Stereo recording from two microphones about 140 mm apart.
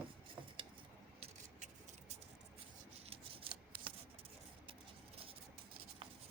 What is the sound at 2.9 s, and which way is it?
Scissors, 45° right (ahead or behind).